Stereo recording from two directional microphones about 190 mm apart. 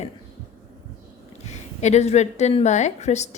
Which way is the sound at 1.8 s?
35° left (ahead or behind).